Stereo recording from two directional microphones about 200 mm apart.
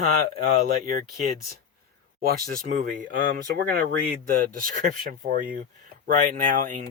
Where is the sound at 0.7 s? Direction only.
45° right (ahead or behind).